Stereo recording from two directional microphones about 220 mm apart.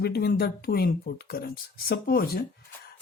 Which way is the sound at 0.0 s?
45° left (ahead or behind).